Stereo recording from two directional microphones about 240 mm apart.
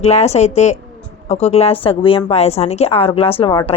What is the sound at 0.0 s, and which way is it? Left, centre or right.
Speech, left.